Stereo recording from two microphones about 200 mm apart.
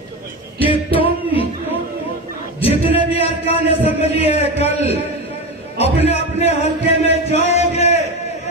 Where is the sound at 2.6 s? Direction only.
30° left (ahead or behind).